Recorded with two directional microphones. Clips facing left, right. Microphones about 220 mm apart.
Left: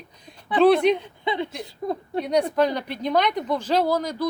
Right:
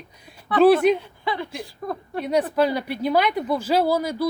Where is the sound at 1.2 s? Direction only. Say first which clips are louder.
Left 2 dB; 20° left (ahead or behind).